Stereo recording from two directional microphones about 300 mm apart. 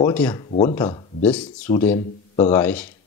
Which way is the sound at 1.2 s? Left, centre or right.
Centre.